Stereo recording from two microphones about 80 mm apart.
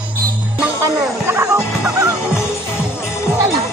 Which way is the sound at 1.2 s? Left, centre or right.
Right.